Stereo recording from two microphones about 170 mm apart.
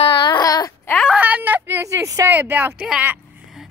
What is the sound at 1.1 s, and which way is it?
Speech, 10° right (ahead or behind).